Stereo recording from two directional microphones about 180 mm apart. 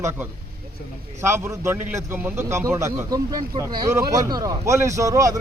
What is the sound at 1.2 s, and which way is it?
A man's voice, 15° right (ahead or behind).